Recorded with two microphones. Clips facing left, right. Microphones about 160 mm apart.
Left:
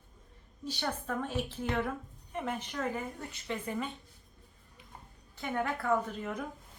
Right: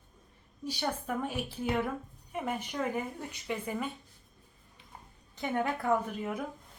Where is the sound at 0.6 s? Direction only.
10° right (ahead or behind).